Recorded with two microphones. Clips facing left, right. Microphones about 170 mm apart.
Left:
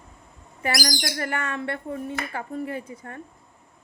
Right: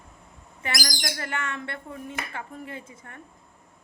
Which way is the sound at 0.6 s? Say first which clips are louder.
Left 6 dB; 35° left (ahead or behind).